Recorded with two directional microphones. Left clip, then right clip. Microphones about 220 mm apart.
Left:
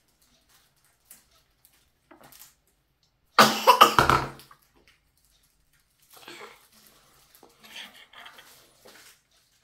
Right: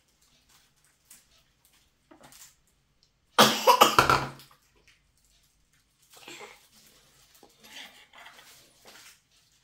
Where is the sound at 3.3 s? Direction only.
15° right (ahead or behind).